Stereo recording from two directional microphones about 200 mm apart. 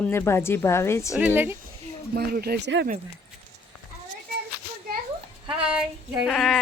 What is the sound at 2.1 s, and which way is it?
Speech, 50° right (ahead or behind).